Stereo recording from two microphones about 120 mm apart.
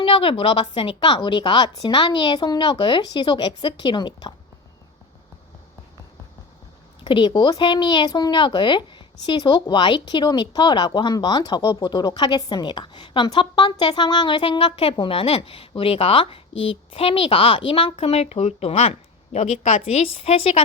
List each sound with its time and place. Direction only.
0.0 s a woman's voice: 50° left (ahead or behind)
7.0 s speech: 40° left (ahead or behind)